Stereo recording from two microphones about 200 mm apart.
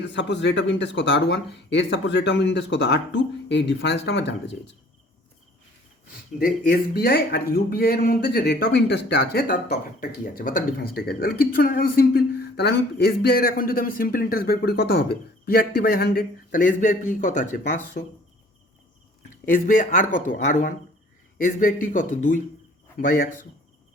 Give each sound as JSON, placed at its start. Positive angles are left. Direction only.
{"t": 0.1, "sound": "speech", "side_deg": 60}
{"t": 6.4, "sound": "speech", "side_deg": 45}
{"t": 19.5, "sound": "speech", "side_deg": 40}